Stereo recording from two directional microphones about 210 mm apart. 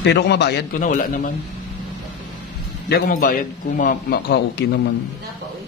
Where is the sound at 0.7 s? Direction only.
40° left (ahead or behind).